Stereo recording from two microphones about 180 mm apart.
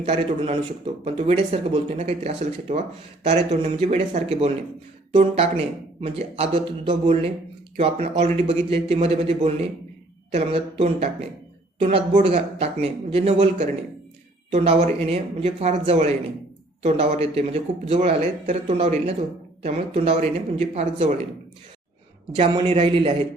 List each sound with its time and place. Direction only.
0.0 s a man's voice: 35° right (ahead or behind)
22.4 s a man's voice: 35° right (ahead or behind)